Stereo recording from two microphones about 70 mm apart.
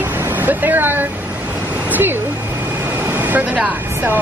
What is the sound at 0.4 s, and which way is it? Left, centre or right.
Speech, right.